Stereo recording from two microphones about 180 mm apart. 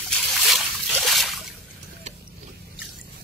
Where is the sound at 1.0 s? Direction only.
Centre (ahead or behind).